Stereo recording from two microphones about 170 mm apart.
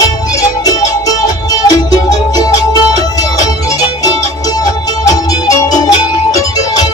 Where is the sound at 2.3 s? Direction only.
20° left (ahead or behind).